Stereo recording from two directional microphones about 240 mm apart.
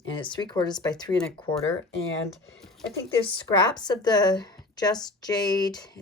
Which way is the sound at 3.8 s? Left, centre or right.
Centre.